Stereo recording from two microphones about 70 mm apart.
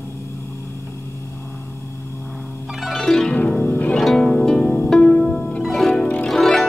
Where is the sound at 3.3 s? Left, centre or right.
Centre.